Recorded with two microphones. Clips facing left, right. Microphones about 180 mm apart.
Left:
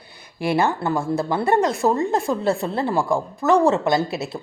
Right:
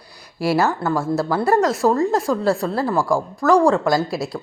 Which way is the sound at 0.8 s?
15° left (ahead or behind).